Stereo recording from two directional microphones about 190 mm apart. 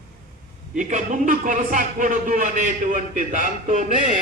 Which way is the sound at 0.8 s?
40° right (ahead or behind).